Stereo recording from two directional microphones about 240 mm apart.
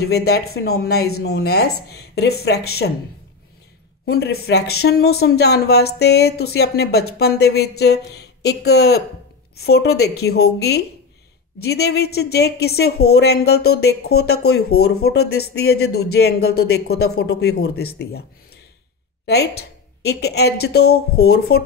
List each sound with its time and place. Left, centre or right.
0.0 s speech: left
4.0 s speech: left
19.2 s a woman's voice: left